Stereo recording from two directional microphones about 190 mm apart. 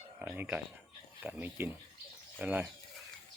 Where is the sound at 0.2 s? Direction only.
10° right (ahead or behind).